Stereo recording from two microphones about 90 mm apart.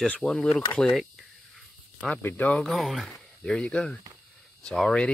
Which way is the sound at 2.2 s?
15° left (ahead or behind).